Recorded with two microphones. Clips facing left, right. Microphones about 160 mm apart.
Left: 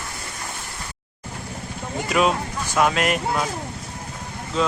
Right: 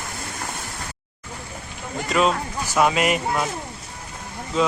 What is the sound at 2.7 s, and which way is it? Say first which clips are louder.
Speech: right 1 dB; 5° right (ahead or behind).